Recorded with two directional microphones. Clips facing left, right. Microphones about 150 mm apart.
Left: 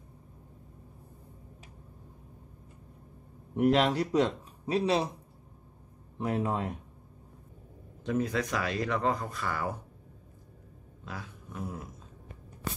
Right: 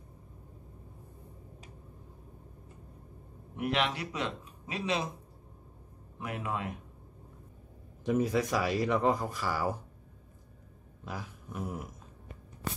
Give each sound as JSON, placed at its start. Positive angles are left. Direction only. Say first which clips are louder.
{"t": 3.5, "sound": "speech", "louder": "left 7 dB", "side_deg": 40}
{"t": 6.1, "sound": "speech", "louder": "left 6 dB", "side_deg": 35}
{"t": 8.0, "sound": "speech", "louder": "right 2 dB", "side_deg": -20}
{"t": 9.4, "sound": "speech", "louder": "right 1 dB", "side_deg": -5}
{"t": 11.1, "sound": "a sound", "louder": "right 1 dB", "side_deg": -15}